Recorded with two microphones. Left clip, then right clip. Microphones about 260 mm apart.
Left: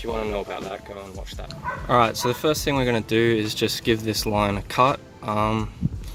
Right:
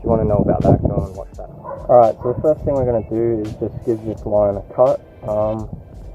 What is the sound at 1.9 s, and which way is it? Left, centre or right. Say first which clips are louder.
Speech: right 8 dB; left.